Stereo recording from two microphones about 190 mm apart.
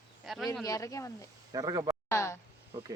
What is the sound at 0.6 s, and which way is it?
Speech, 20° left (ahead or behind).